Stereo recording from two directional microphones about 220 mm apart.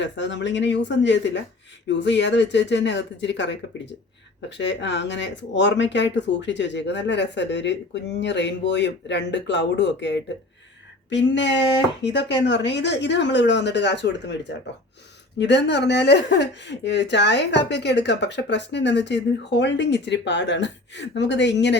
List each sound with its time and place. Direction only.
0.0 s a woman's voice: 55° left (ahead or behind)